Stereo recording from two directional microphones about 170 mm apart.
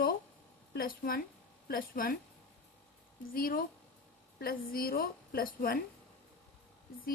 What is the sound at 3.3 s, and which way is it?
Speech, 60° left (ahead or behind).